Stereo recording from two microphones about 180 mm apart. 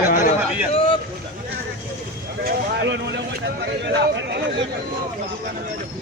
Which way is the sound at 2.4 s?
75° right (ahead or behind).